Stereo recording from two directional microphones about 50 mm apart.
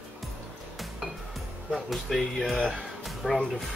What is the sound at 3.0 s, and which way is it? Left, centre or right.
Music, centre.